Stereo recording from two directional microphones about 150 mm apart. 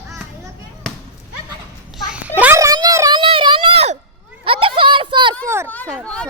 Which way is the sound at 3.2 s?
35° right (ahead or behind).